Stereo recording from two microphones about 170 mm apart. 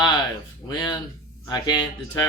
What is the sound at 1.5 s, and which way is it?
Speech, 25° left (ahead or behind).